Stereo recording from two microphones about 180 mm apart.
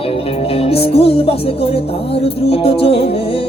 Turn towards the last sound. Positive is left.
turn(degrees=30)  # may be behind; listen again after turning